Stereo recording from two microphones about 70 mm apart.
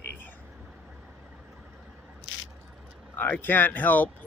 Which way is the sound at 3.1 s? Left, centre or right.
Left.